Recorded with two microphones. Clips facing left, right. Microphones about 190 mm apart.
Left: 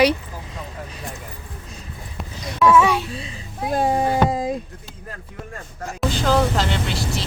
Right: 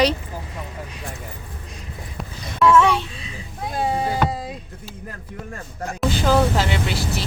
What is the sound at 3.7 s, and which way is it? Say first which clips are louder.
Speech: left 4 dB; 45° left (ahead or behind).